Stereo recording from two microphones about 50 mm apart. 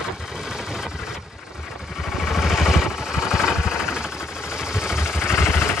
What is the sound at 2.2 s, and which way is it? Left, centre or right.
Vehicle, centre.